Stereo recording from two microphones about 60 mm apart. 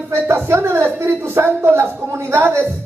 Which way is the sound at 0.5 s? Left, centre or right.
Right.